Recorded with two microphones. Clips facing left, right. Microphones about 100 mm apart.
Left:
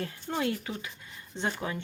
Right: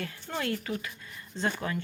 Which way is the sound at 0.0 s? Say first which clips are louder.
Left 3 dB; 25° left (ahead or behind).